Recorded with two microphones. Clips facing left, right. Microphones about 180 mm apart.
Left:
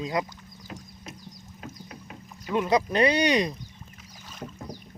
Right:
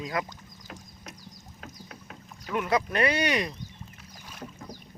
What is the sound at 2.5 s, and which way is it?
Speech, 20° left (ahead or behind).